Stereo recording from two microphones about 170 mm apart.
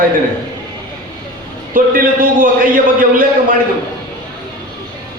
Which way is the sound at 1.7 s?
55° right (ahead or behind).